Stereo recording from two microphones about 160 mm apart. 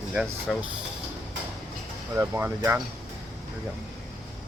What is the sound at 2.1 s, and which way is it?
Speech, 15° right (ahead or behind).